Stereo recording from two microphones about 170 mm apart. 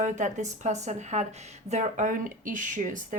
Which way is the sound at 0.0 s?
45° right (ahead or behind).